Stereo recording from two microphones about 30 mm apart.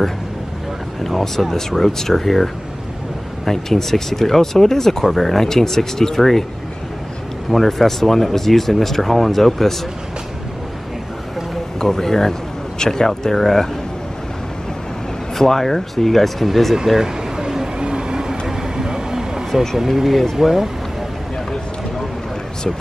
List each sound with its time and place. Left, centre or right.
1.0 s speech: centre
5.0 s speech: centre
7.5 s speech: centre
11.8 s speech: centre
15.3 s speech: centre
16.7 s a sound: centre
17.7 s vehicle: right
19.9 s speech: centre